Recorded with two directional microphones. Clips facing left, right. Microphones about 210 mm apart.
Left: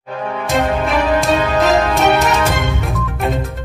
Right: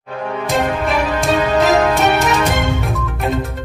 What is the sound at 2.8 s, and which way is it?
Music, centre (ahead or behind).